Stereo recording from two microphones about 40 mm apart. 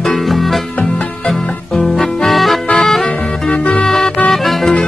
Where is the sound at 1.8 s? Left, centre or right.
Centre.